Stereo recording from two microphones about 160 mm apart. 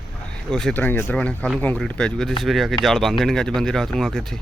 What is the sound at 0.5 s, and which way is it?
Speech, 5° left (ahead or behind).